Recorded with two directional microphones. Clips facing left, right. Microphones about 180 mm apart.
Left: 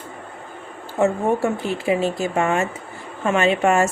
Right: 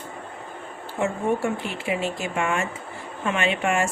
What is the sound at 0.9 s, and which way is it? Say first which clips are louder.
Speech: left 5 dB; 40° left (ahead or behind).